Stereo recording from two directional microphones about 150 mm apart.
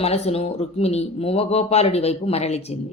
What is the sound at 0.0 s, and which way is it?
Speech, 45° left (ahead or behind).